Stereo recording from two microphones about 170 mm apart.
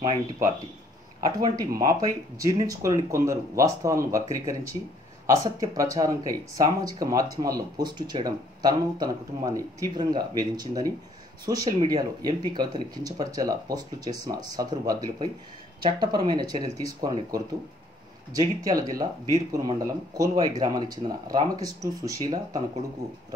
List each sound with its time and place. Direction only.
1.2 s speech: 25° right (ahead or behind)